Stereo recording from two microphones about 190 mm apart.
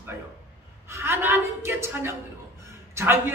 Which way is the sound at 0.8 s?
10° right (ahead or behind).